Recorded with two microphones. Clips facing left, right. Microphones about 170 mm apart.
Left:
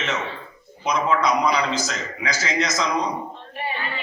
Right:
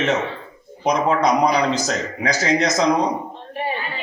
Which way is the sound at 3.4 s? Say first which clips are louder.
Right 4 dB; 40° right (ahead or behind).